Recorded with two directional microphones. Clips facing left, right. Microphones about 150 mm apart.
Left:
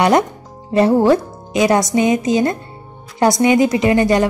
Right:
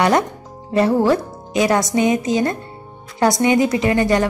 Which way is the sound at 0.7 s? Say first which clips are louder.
Left 3 dB; 20° left (ahead or behind).